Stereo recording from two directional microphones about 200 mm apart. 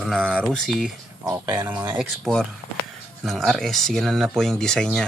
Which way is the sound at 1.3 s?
10° right (ahead or behind).